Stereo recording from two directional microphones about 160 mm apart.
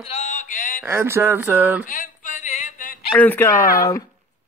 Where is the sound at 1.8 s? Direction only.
55° left (ahead or behind).